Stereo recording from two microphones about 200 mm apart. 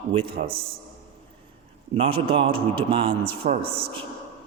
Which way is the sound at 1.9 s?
30° right (ahead or behind).